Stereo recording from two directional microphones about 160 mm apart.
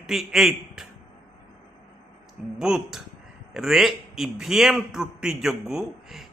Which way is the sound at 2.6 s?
5° right (ahead or behind).